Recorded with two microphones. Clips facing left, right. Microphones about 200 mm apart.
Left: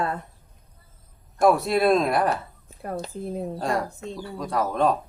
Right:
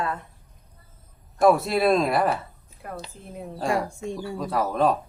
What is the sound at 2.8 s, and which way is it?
Speech, 40° left (ahead or behind).